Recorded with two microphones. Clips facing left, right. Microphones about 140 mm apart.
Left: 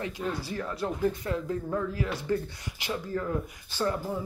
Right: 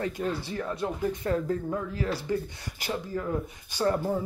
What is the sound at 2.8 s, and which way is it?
Speech, 40° right (ahead or behind).